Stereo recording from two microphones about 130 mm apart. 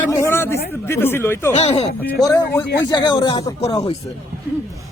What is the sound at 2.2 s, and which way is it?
Speech, 30° left (ahead or behind).